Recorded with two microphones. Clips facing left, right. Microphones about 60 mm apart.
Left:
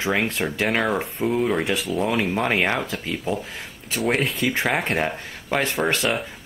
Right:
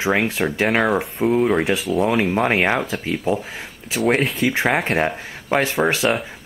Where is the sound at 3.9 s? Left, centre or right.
Centre.